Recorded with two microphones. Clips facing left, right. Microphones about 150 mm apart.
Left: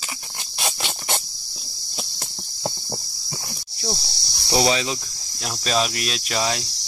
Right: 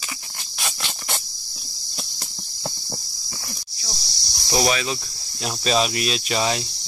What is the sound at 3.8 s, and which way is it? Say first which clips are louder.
Insect: left 14 dB; 55° left (ahead or behind).